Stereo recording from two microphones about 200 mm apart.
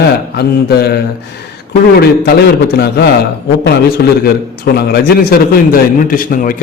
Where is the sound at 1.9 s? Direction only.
50° left (ahead or behind).